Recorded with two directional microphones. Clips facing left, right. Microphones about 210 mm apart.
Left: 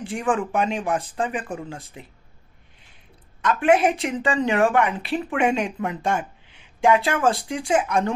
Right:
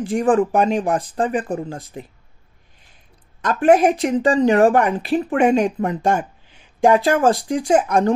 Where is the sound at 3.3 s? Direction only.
40° right (ahead or behind).